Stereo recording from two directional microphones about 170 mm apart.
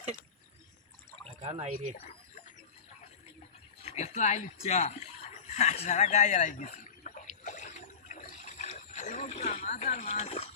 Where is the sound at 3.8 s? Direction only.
40° left (ahead or behind).